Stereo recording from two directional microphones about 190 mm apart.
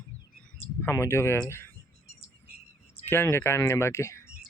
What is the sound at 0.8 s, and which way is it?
Speech, 10° left (ahead or behind).